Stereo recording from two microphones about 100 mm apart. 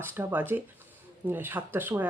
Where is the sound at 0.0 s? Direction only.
25° right (ahead or behind).